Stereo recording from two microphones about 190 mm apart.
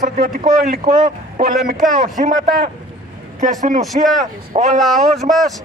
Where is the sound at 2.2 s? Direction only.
40° right (ahead or behind).